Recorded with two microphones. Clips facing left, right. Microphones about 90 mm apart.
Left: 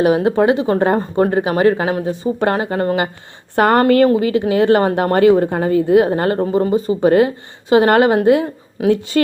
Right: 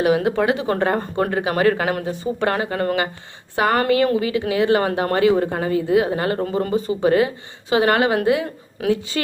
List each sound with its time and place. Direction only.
0.0 s speech: 35° left (ahead or behind)
2.4 s a woman's voice: 30° left (ahead or behind)
3.5 s a woman's voice: 45° left (ahead or behind)
4.1 s a woman's voice: 35° left (ahead or behind)
6.4 s speech: 20° left (ahead or behind)
6.7 s a woman's voice: 35° left (ahead or behind)